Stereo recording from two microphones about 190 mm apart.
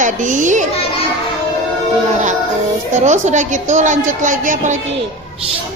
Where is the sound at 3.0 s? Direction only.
40° right (ahead or behind).